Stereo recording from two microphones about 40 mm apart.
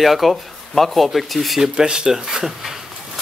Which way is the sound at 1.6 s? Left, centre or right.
Centre.